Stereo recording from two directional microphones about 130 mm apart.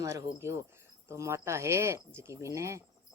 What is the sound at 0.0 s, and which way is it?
Speech, 25° right (ahead or behind).